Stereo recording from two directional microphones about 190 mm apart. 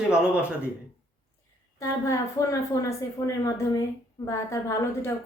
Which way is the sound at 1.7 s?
15° left (ahead or behind).